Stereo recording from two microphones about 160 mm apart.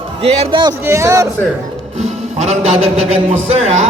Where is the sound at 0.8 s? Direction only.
15° right (ahead or behind).